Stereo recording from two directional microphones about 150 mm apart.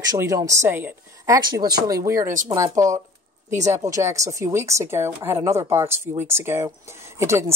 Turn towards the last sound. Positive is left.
turn(degrees=-20)  # may be behind; listen again after turning